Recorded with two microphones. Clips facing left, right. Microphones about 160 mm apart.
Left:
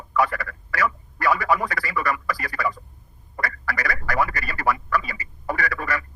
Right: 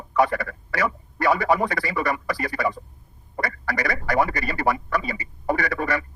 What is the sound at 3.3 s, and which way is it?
Telephone, 25° right (ahead or behind).